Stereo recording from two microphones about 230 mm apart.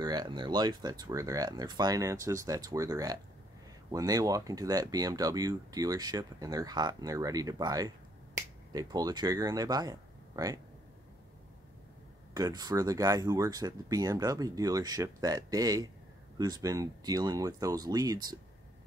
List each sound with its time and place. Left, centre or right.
0.0 s speech: centre
12.4 s speech: centre